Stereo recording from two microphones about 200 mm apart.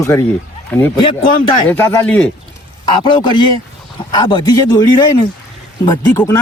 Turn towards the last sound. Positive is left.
turn(degrees=10)  # may be behind; listen again after turning